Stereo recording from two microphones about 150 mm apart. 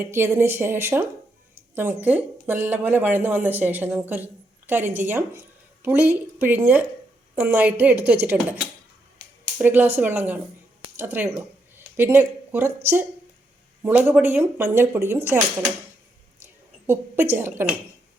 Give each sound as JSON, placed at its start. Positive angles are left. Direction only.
{"t": 0.0, "sound": "a woman's voice", "side_deg": -15}
{"t": 9.6, "sound": "speech", "side_deg": -10}
{"t": 16.4, "sound": "a sound", "side_deg": -15}